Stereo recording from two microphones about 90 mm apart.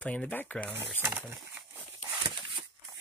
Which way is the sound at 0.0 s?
15° left (ahead or behind).